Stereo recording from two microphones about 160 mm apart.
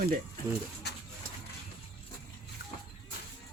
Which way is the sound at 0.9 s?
90° left.